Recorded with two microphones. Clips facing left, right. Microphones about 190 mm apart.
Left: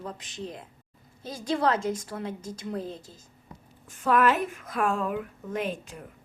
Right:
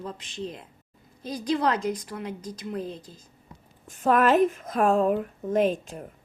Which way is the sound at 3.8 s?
45° right (ahead or behind).